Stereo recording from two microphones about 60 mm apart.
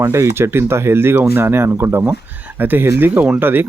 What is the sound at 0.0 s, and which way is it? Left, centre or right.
Speech, right.